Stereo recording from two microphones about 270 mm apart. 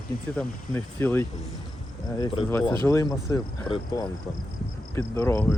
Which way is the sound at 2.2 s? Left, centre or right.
Centre.